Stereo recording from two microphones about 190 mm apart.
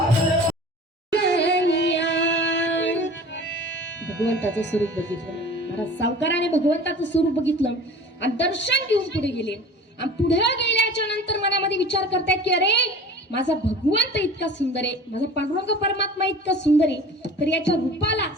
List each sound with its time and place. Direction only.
1.1 s singing: 65° left (ahead or behind)
5.7 s a woman's voice: 70° left (ahead or behind)